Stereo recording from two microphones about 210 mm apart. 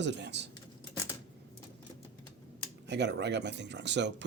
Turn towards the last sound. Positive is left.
turn(degrees=-55)  # may be behind; listen again after turning